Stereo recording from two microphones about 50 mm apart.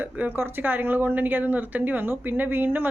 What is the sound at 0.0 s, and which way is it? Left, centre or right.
Speech, right.